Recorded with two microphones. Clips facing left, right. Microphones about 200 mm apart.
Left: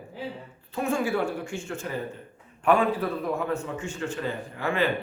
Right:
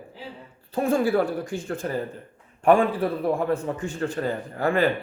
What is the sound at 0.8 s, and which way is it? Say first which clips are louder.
Speech: right 5 dB; 35° right (ahead or behind).